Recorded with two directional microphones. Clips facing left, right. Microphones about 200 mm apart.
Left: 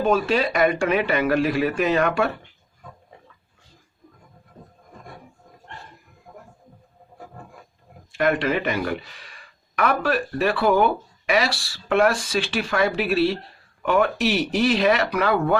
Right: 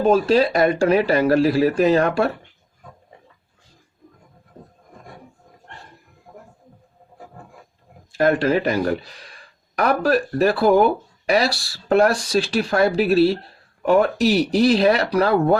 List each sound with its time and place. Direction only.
0.0 s speech: 35° right (ahead or behind)
6.3 s music: 30° right (ahead or behind)
8.1 s speech: 35° right (ahead or behind)